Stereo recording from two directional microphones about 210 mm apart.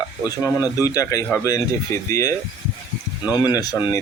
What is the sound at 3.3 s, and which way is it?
Speech, 20° left (ahead or behind).